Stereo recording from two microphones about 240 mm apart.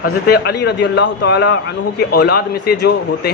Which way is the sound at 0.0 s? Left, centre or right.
Left.